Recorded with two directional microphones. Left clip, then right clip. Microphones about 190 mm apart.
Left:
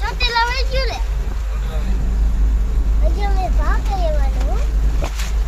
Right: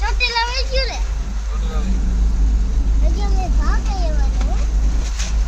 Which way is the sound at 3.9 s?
45° left (ahead or behind).